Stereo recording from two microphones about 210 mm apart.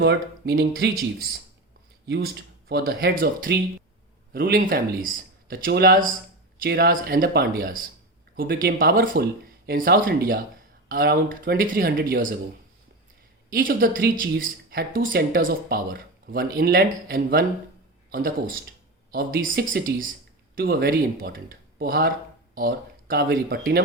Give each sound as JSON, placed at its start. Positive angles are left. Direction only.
{"t": 0.0, "sound": "speech", "side_deg": -50}
{"t": 13.5, "sound": "speech", "side_deg": -40}